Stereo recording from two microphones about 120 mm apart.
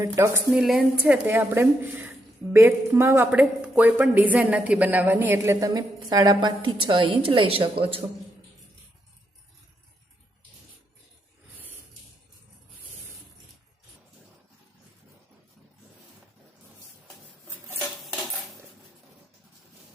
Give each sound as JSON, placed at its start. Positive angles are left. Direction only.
{"t": 0.0, "sound": "a woman's voice", "side_deg": -20}
{"t": 0.5, "sound": "a woman's voice", "side_deg": -5}
{"t": 3.3, "sound": "a woman's voice", "side_deg": -15}